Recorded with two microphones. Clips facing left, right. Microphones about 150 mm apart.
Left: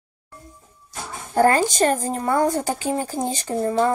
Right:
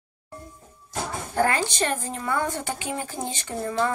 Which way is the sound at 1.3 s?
40° left (ahead or behind).